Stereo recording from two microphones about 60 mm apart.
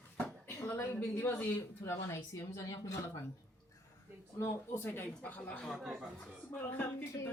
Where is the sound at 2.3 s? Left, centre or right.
Left.